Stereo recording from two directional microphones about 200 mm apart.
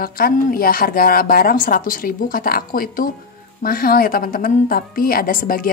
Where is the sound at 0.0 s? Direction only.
45° left (ahead or behind).